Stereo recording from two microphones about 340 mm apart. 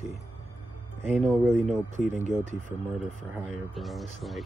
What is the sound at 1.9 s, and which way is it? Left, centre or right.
Speech, right.